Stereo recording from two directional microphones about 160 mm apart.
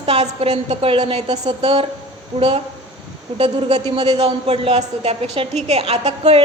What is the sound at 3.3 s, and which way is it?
A woman's voice, 40° right (ahead or behind).